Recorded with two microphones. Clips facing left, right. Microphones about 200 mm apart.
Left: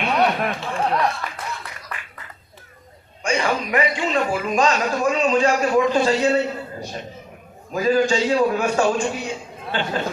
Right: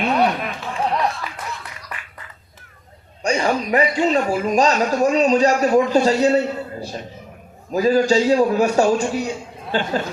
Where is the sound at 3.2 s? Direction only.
40° right (ahead or behind).